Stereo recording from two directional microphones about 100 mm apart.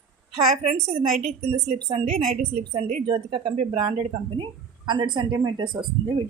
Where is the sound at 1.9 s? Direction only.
90° right.